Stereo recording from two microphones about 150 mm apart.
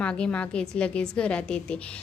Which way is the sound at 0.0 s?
5° left (ahead or behind).